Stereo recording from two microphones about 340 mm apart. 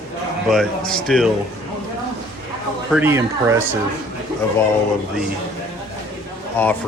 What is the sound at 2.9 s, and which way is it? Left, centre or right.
Speech, centre.